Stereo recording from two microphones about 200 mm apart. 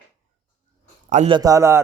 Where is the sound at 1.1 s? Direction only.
35° right (ahead or behind).